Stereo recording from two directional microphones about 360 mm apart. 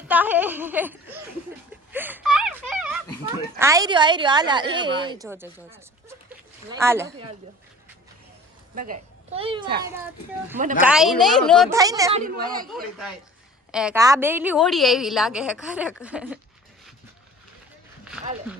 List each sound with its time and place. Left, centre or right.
0.1 s a woman's voice: centre
1.9 s whimper: centre
3.6 s a woman's voice: centre
8.7 s a woman's voice: right; by 11.8 s centre
11.8 s a woman's voice: centre
12.2 s speech: right
13.7 s a woman's voice: centre